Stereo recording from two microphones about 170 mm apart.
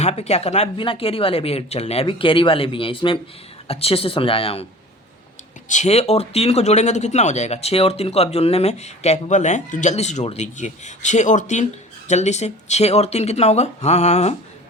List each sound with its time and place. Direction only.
0.0 s speech: 40° left (ahead or behind)
5.6 s speech: 45° left (ahead or behind)